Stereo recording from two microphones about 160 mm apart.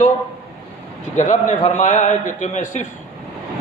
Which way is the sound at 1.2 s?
50° left (ahead or behind).